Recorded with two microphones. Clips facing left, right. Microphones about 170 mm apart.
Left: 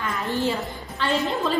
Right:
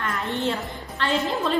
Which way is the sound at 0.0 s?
Centre (ahead or behind).